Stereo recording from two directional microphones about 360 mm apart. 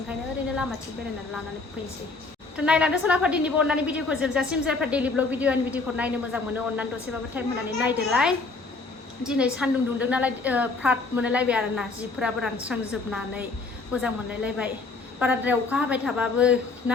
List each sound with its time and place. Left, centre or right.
0.1 s a woman's voice: centre
2.6 s a woman's voice: centre